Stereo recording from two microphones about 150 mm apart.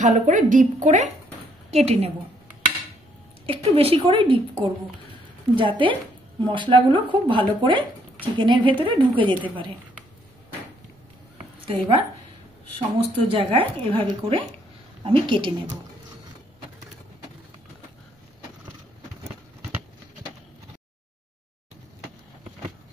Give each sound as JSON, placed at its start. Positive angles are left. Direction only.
{"t": 0.0, "sound": "speech", "side_deg": -55}
{"t": 1.9, "sound": "speech", "side_deg": -40}
{"t": 3.4, "sound": "speech", "side_deg": -40}
{"t": 11.6, "sound": "a woman's voice", "side_deg": -35}